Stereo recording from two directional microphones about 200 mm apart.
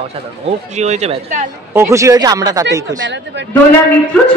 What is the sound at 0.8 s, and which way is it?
Speech, 35° right (ahead or behind).